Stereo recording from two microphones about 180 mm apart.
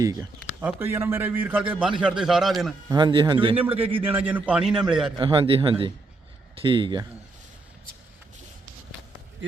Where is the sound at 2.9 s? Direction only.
25° right (ahead or behind).